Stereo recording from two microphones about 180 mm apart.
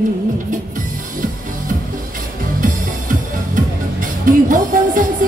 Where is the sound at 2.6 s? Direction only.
50° right (ahead or behind).